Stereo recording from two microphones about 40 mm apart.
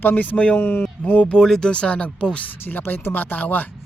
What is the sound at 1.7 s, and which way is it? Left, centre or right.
Speech, left.